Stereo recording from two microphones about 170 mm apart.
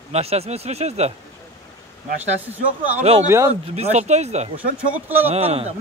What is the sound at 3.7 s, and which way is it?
Speech, 40° right (ahead or behind).